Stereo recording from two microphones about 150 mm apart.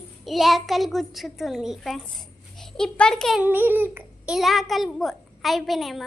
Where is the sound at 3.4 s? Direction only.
15° right (ahead or behind).